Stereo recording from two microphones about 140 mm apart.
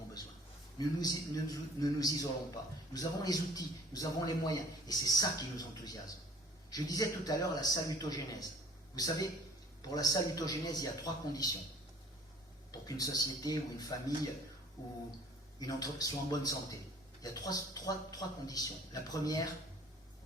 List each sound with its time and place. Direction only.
0.8 s a man's voice: 25° left (ahead or behind)
12.7 s a man's voice: 25° left (ahead or behind)
15.5 s a man's voice: 25° left (ahead or behind)